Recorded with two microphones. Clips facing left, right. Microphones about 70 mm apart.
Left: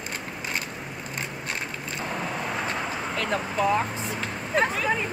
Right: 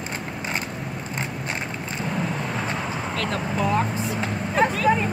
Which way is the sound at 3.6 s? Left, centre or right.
Centre.